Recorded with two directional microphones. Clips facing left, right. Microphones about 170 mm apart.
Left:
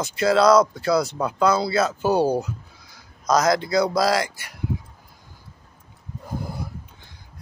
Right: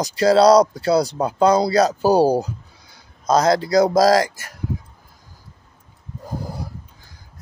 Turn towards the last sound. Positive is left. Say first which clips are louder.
# right 1 dB
turn(degrees=-40)  # may be behind; listen again after turning